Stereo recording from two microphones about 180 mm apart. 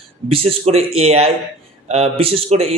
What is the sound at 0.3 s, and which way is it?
Speech, 35° right (ahead or behind).